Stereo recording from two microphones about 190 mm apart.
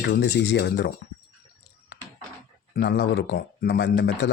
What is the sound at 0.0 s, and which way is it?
Speech, 60° left (ahead or behind).